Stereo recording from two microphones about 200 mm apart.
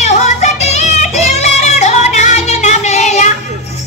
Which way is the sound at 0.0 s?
35° left (ahead or behind).